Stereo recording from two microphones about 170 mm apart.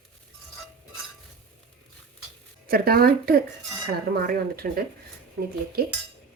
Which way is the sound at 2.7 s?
60° right (ahead or behind).